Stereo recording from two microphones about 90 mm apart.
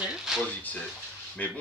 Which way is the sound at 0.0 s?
5° right (ahead or behind).